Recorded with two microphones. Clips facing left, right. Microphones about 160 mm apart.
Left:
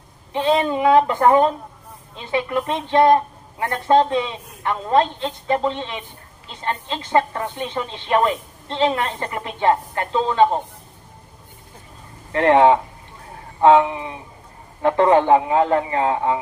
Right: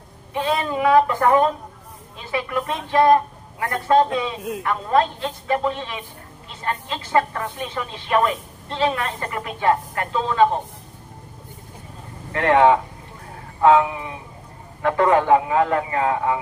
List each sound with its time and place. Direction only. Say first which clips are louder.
0.3 s speech: left 4 dB; 25° left (ahead or behind)
12.3 s speech: left 2 dB; 30° left (ahead or behind)